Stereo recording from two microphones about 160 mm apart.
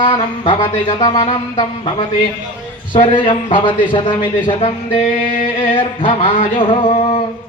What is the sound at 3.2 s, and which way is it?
Music, 30° left (ahead or behind).